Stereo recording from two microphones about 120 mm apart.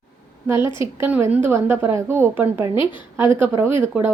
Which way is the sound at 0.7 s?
40° left (ahead or behind).